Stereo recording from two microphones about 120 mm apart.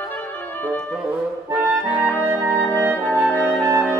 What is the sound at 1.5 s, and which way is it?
Clarinet, 15° left (ahead or behind).